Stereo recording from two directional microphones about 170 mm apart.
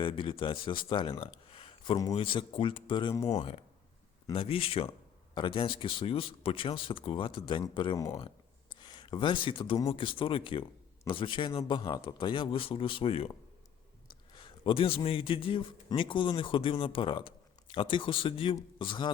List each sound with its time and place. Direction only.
0.0 s speech: 30° left (ahead or behind)
1.5 s a sound: 30° left (ahead or behind)
2.1 s a man's voice: 30° left (ahead or behind)
3.3 s a man's voice: 40° left (ahead or behind)
14.3 s a man's voice: 30° left (ahead or behind)